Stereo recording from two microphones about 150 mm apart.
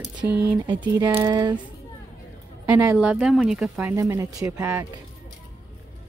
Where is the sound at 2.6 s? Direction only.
10° right (ahead or behind).